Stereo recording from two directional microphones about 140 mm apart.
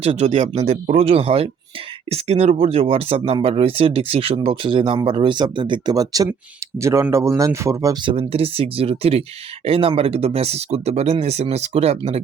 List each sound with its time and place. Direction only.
0.0 s speech: 50° right (ahead or behind); by 7.9 s 20° right (ahead or behind)
8.3 s speech: 45° right (ahead or behind)